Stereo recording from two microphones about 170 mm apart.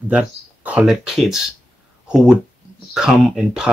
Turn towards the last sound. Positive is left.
turn(degrees=-5)  # may be behind; listen again after turning